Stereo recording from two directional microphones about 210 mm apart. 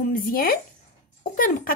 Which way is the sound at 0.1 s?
45° left (ahead or behind).